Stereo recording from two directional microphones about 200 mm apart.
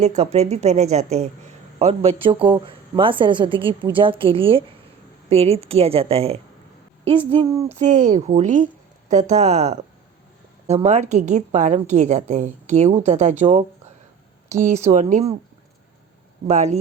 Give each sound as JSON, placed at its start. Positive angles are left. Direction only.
{"t": 0.0, "sound": "a woman's voice", "side_deg": -35}
{"t": 7.7, "sound": "a woman's voice", "side_deg": -35}
{"t": 16.5, "sound": "a woman's voice", "side_deg": -35}